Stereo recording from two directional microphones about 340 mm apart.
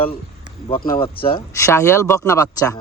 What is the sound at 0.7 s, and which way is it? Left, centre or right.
Speech, left.